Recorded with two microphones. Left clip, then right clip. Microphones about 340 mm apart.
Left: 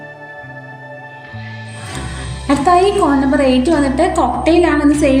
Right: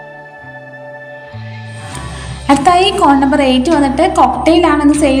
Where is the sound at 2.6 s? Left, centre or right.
Centre.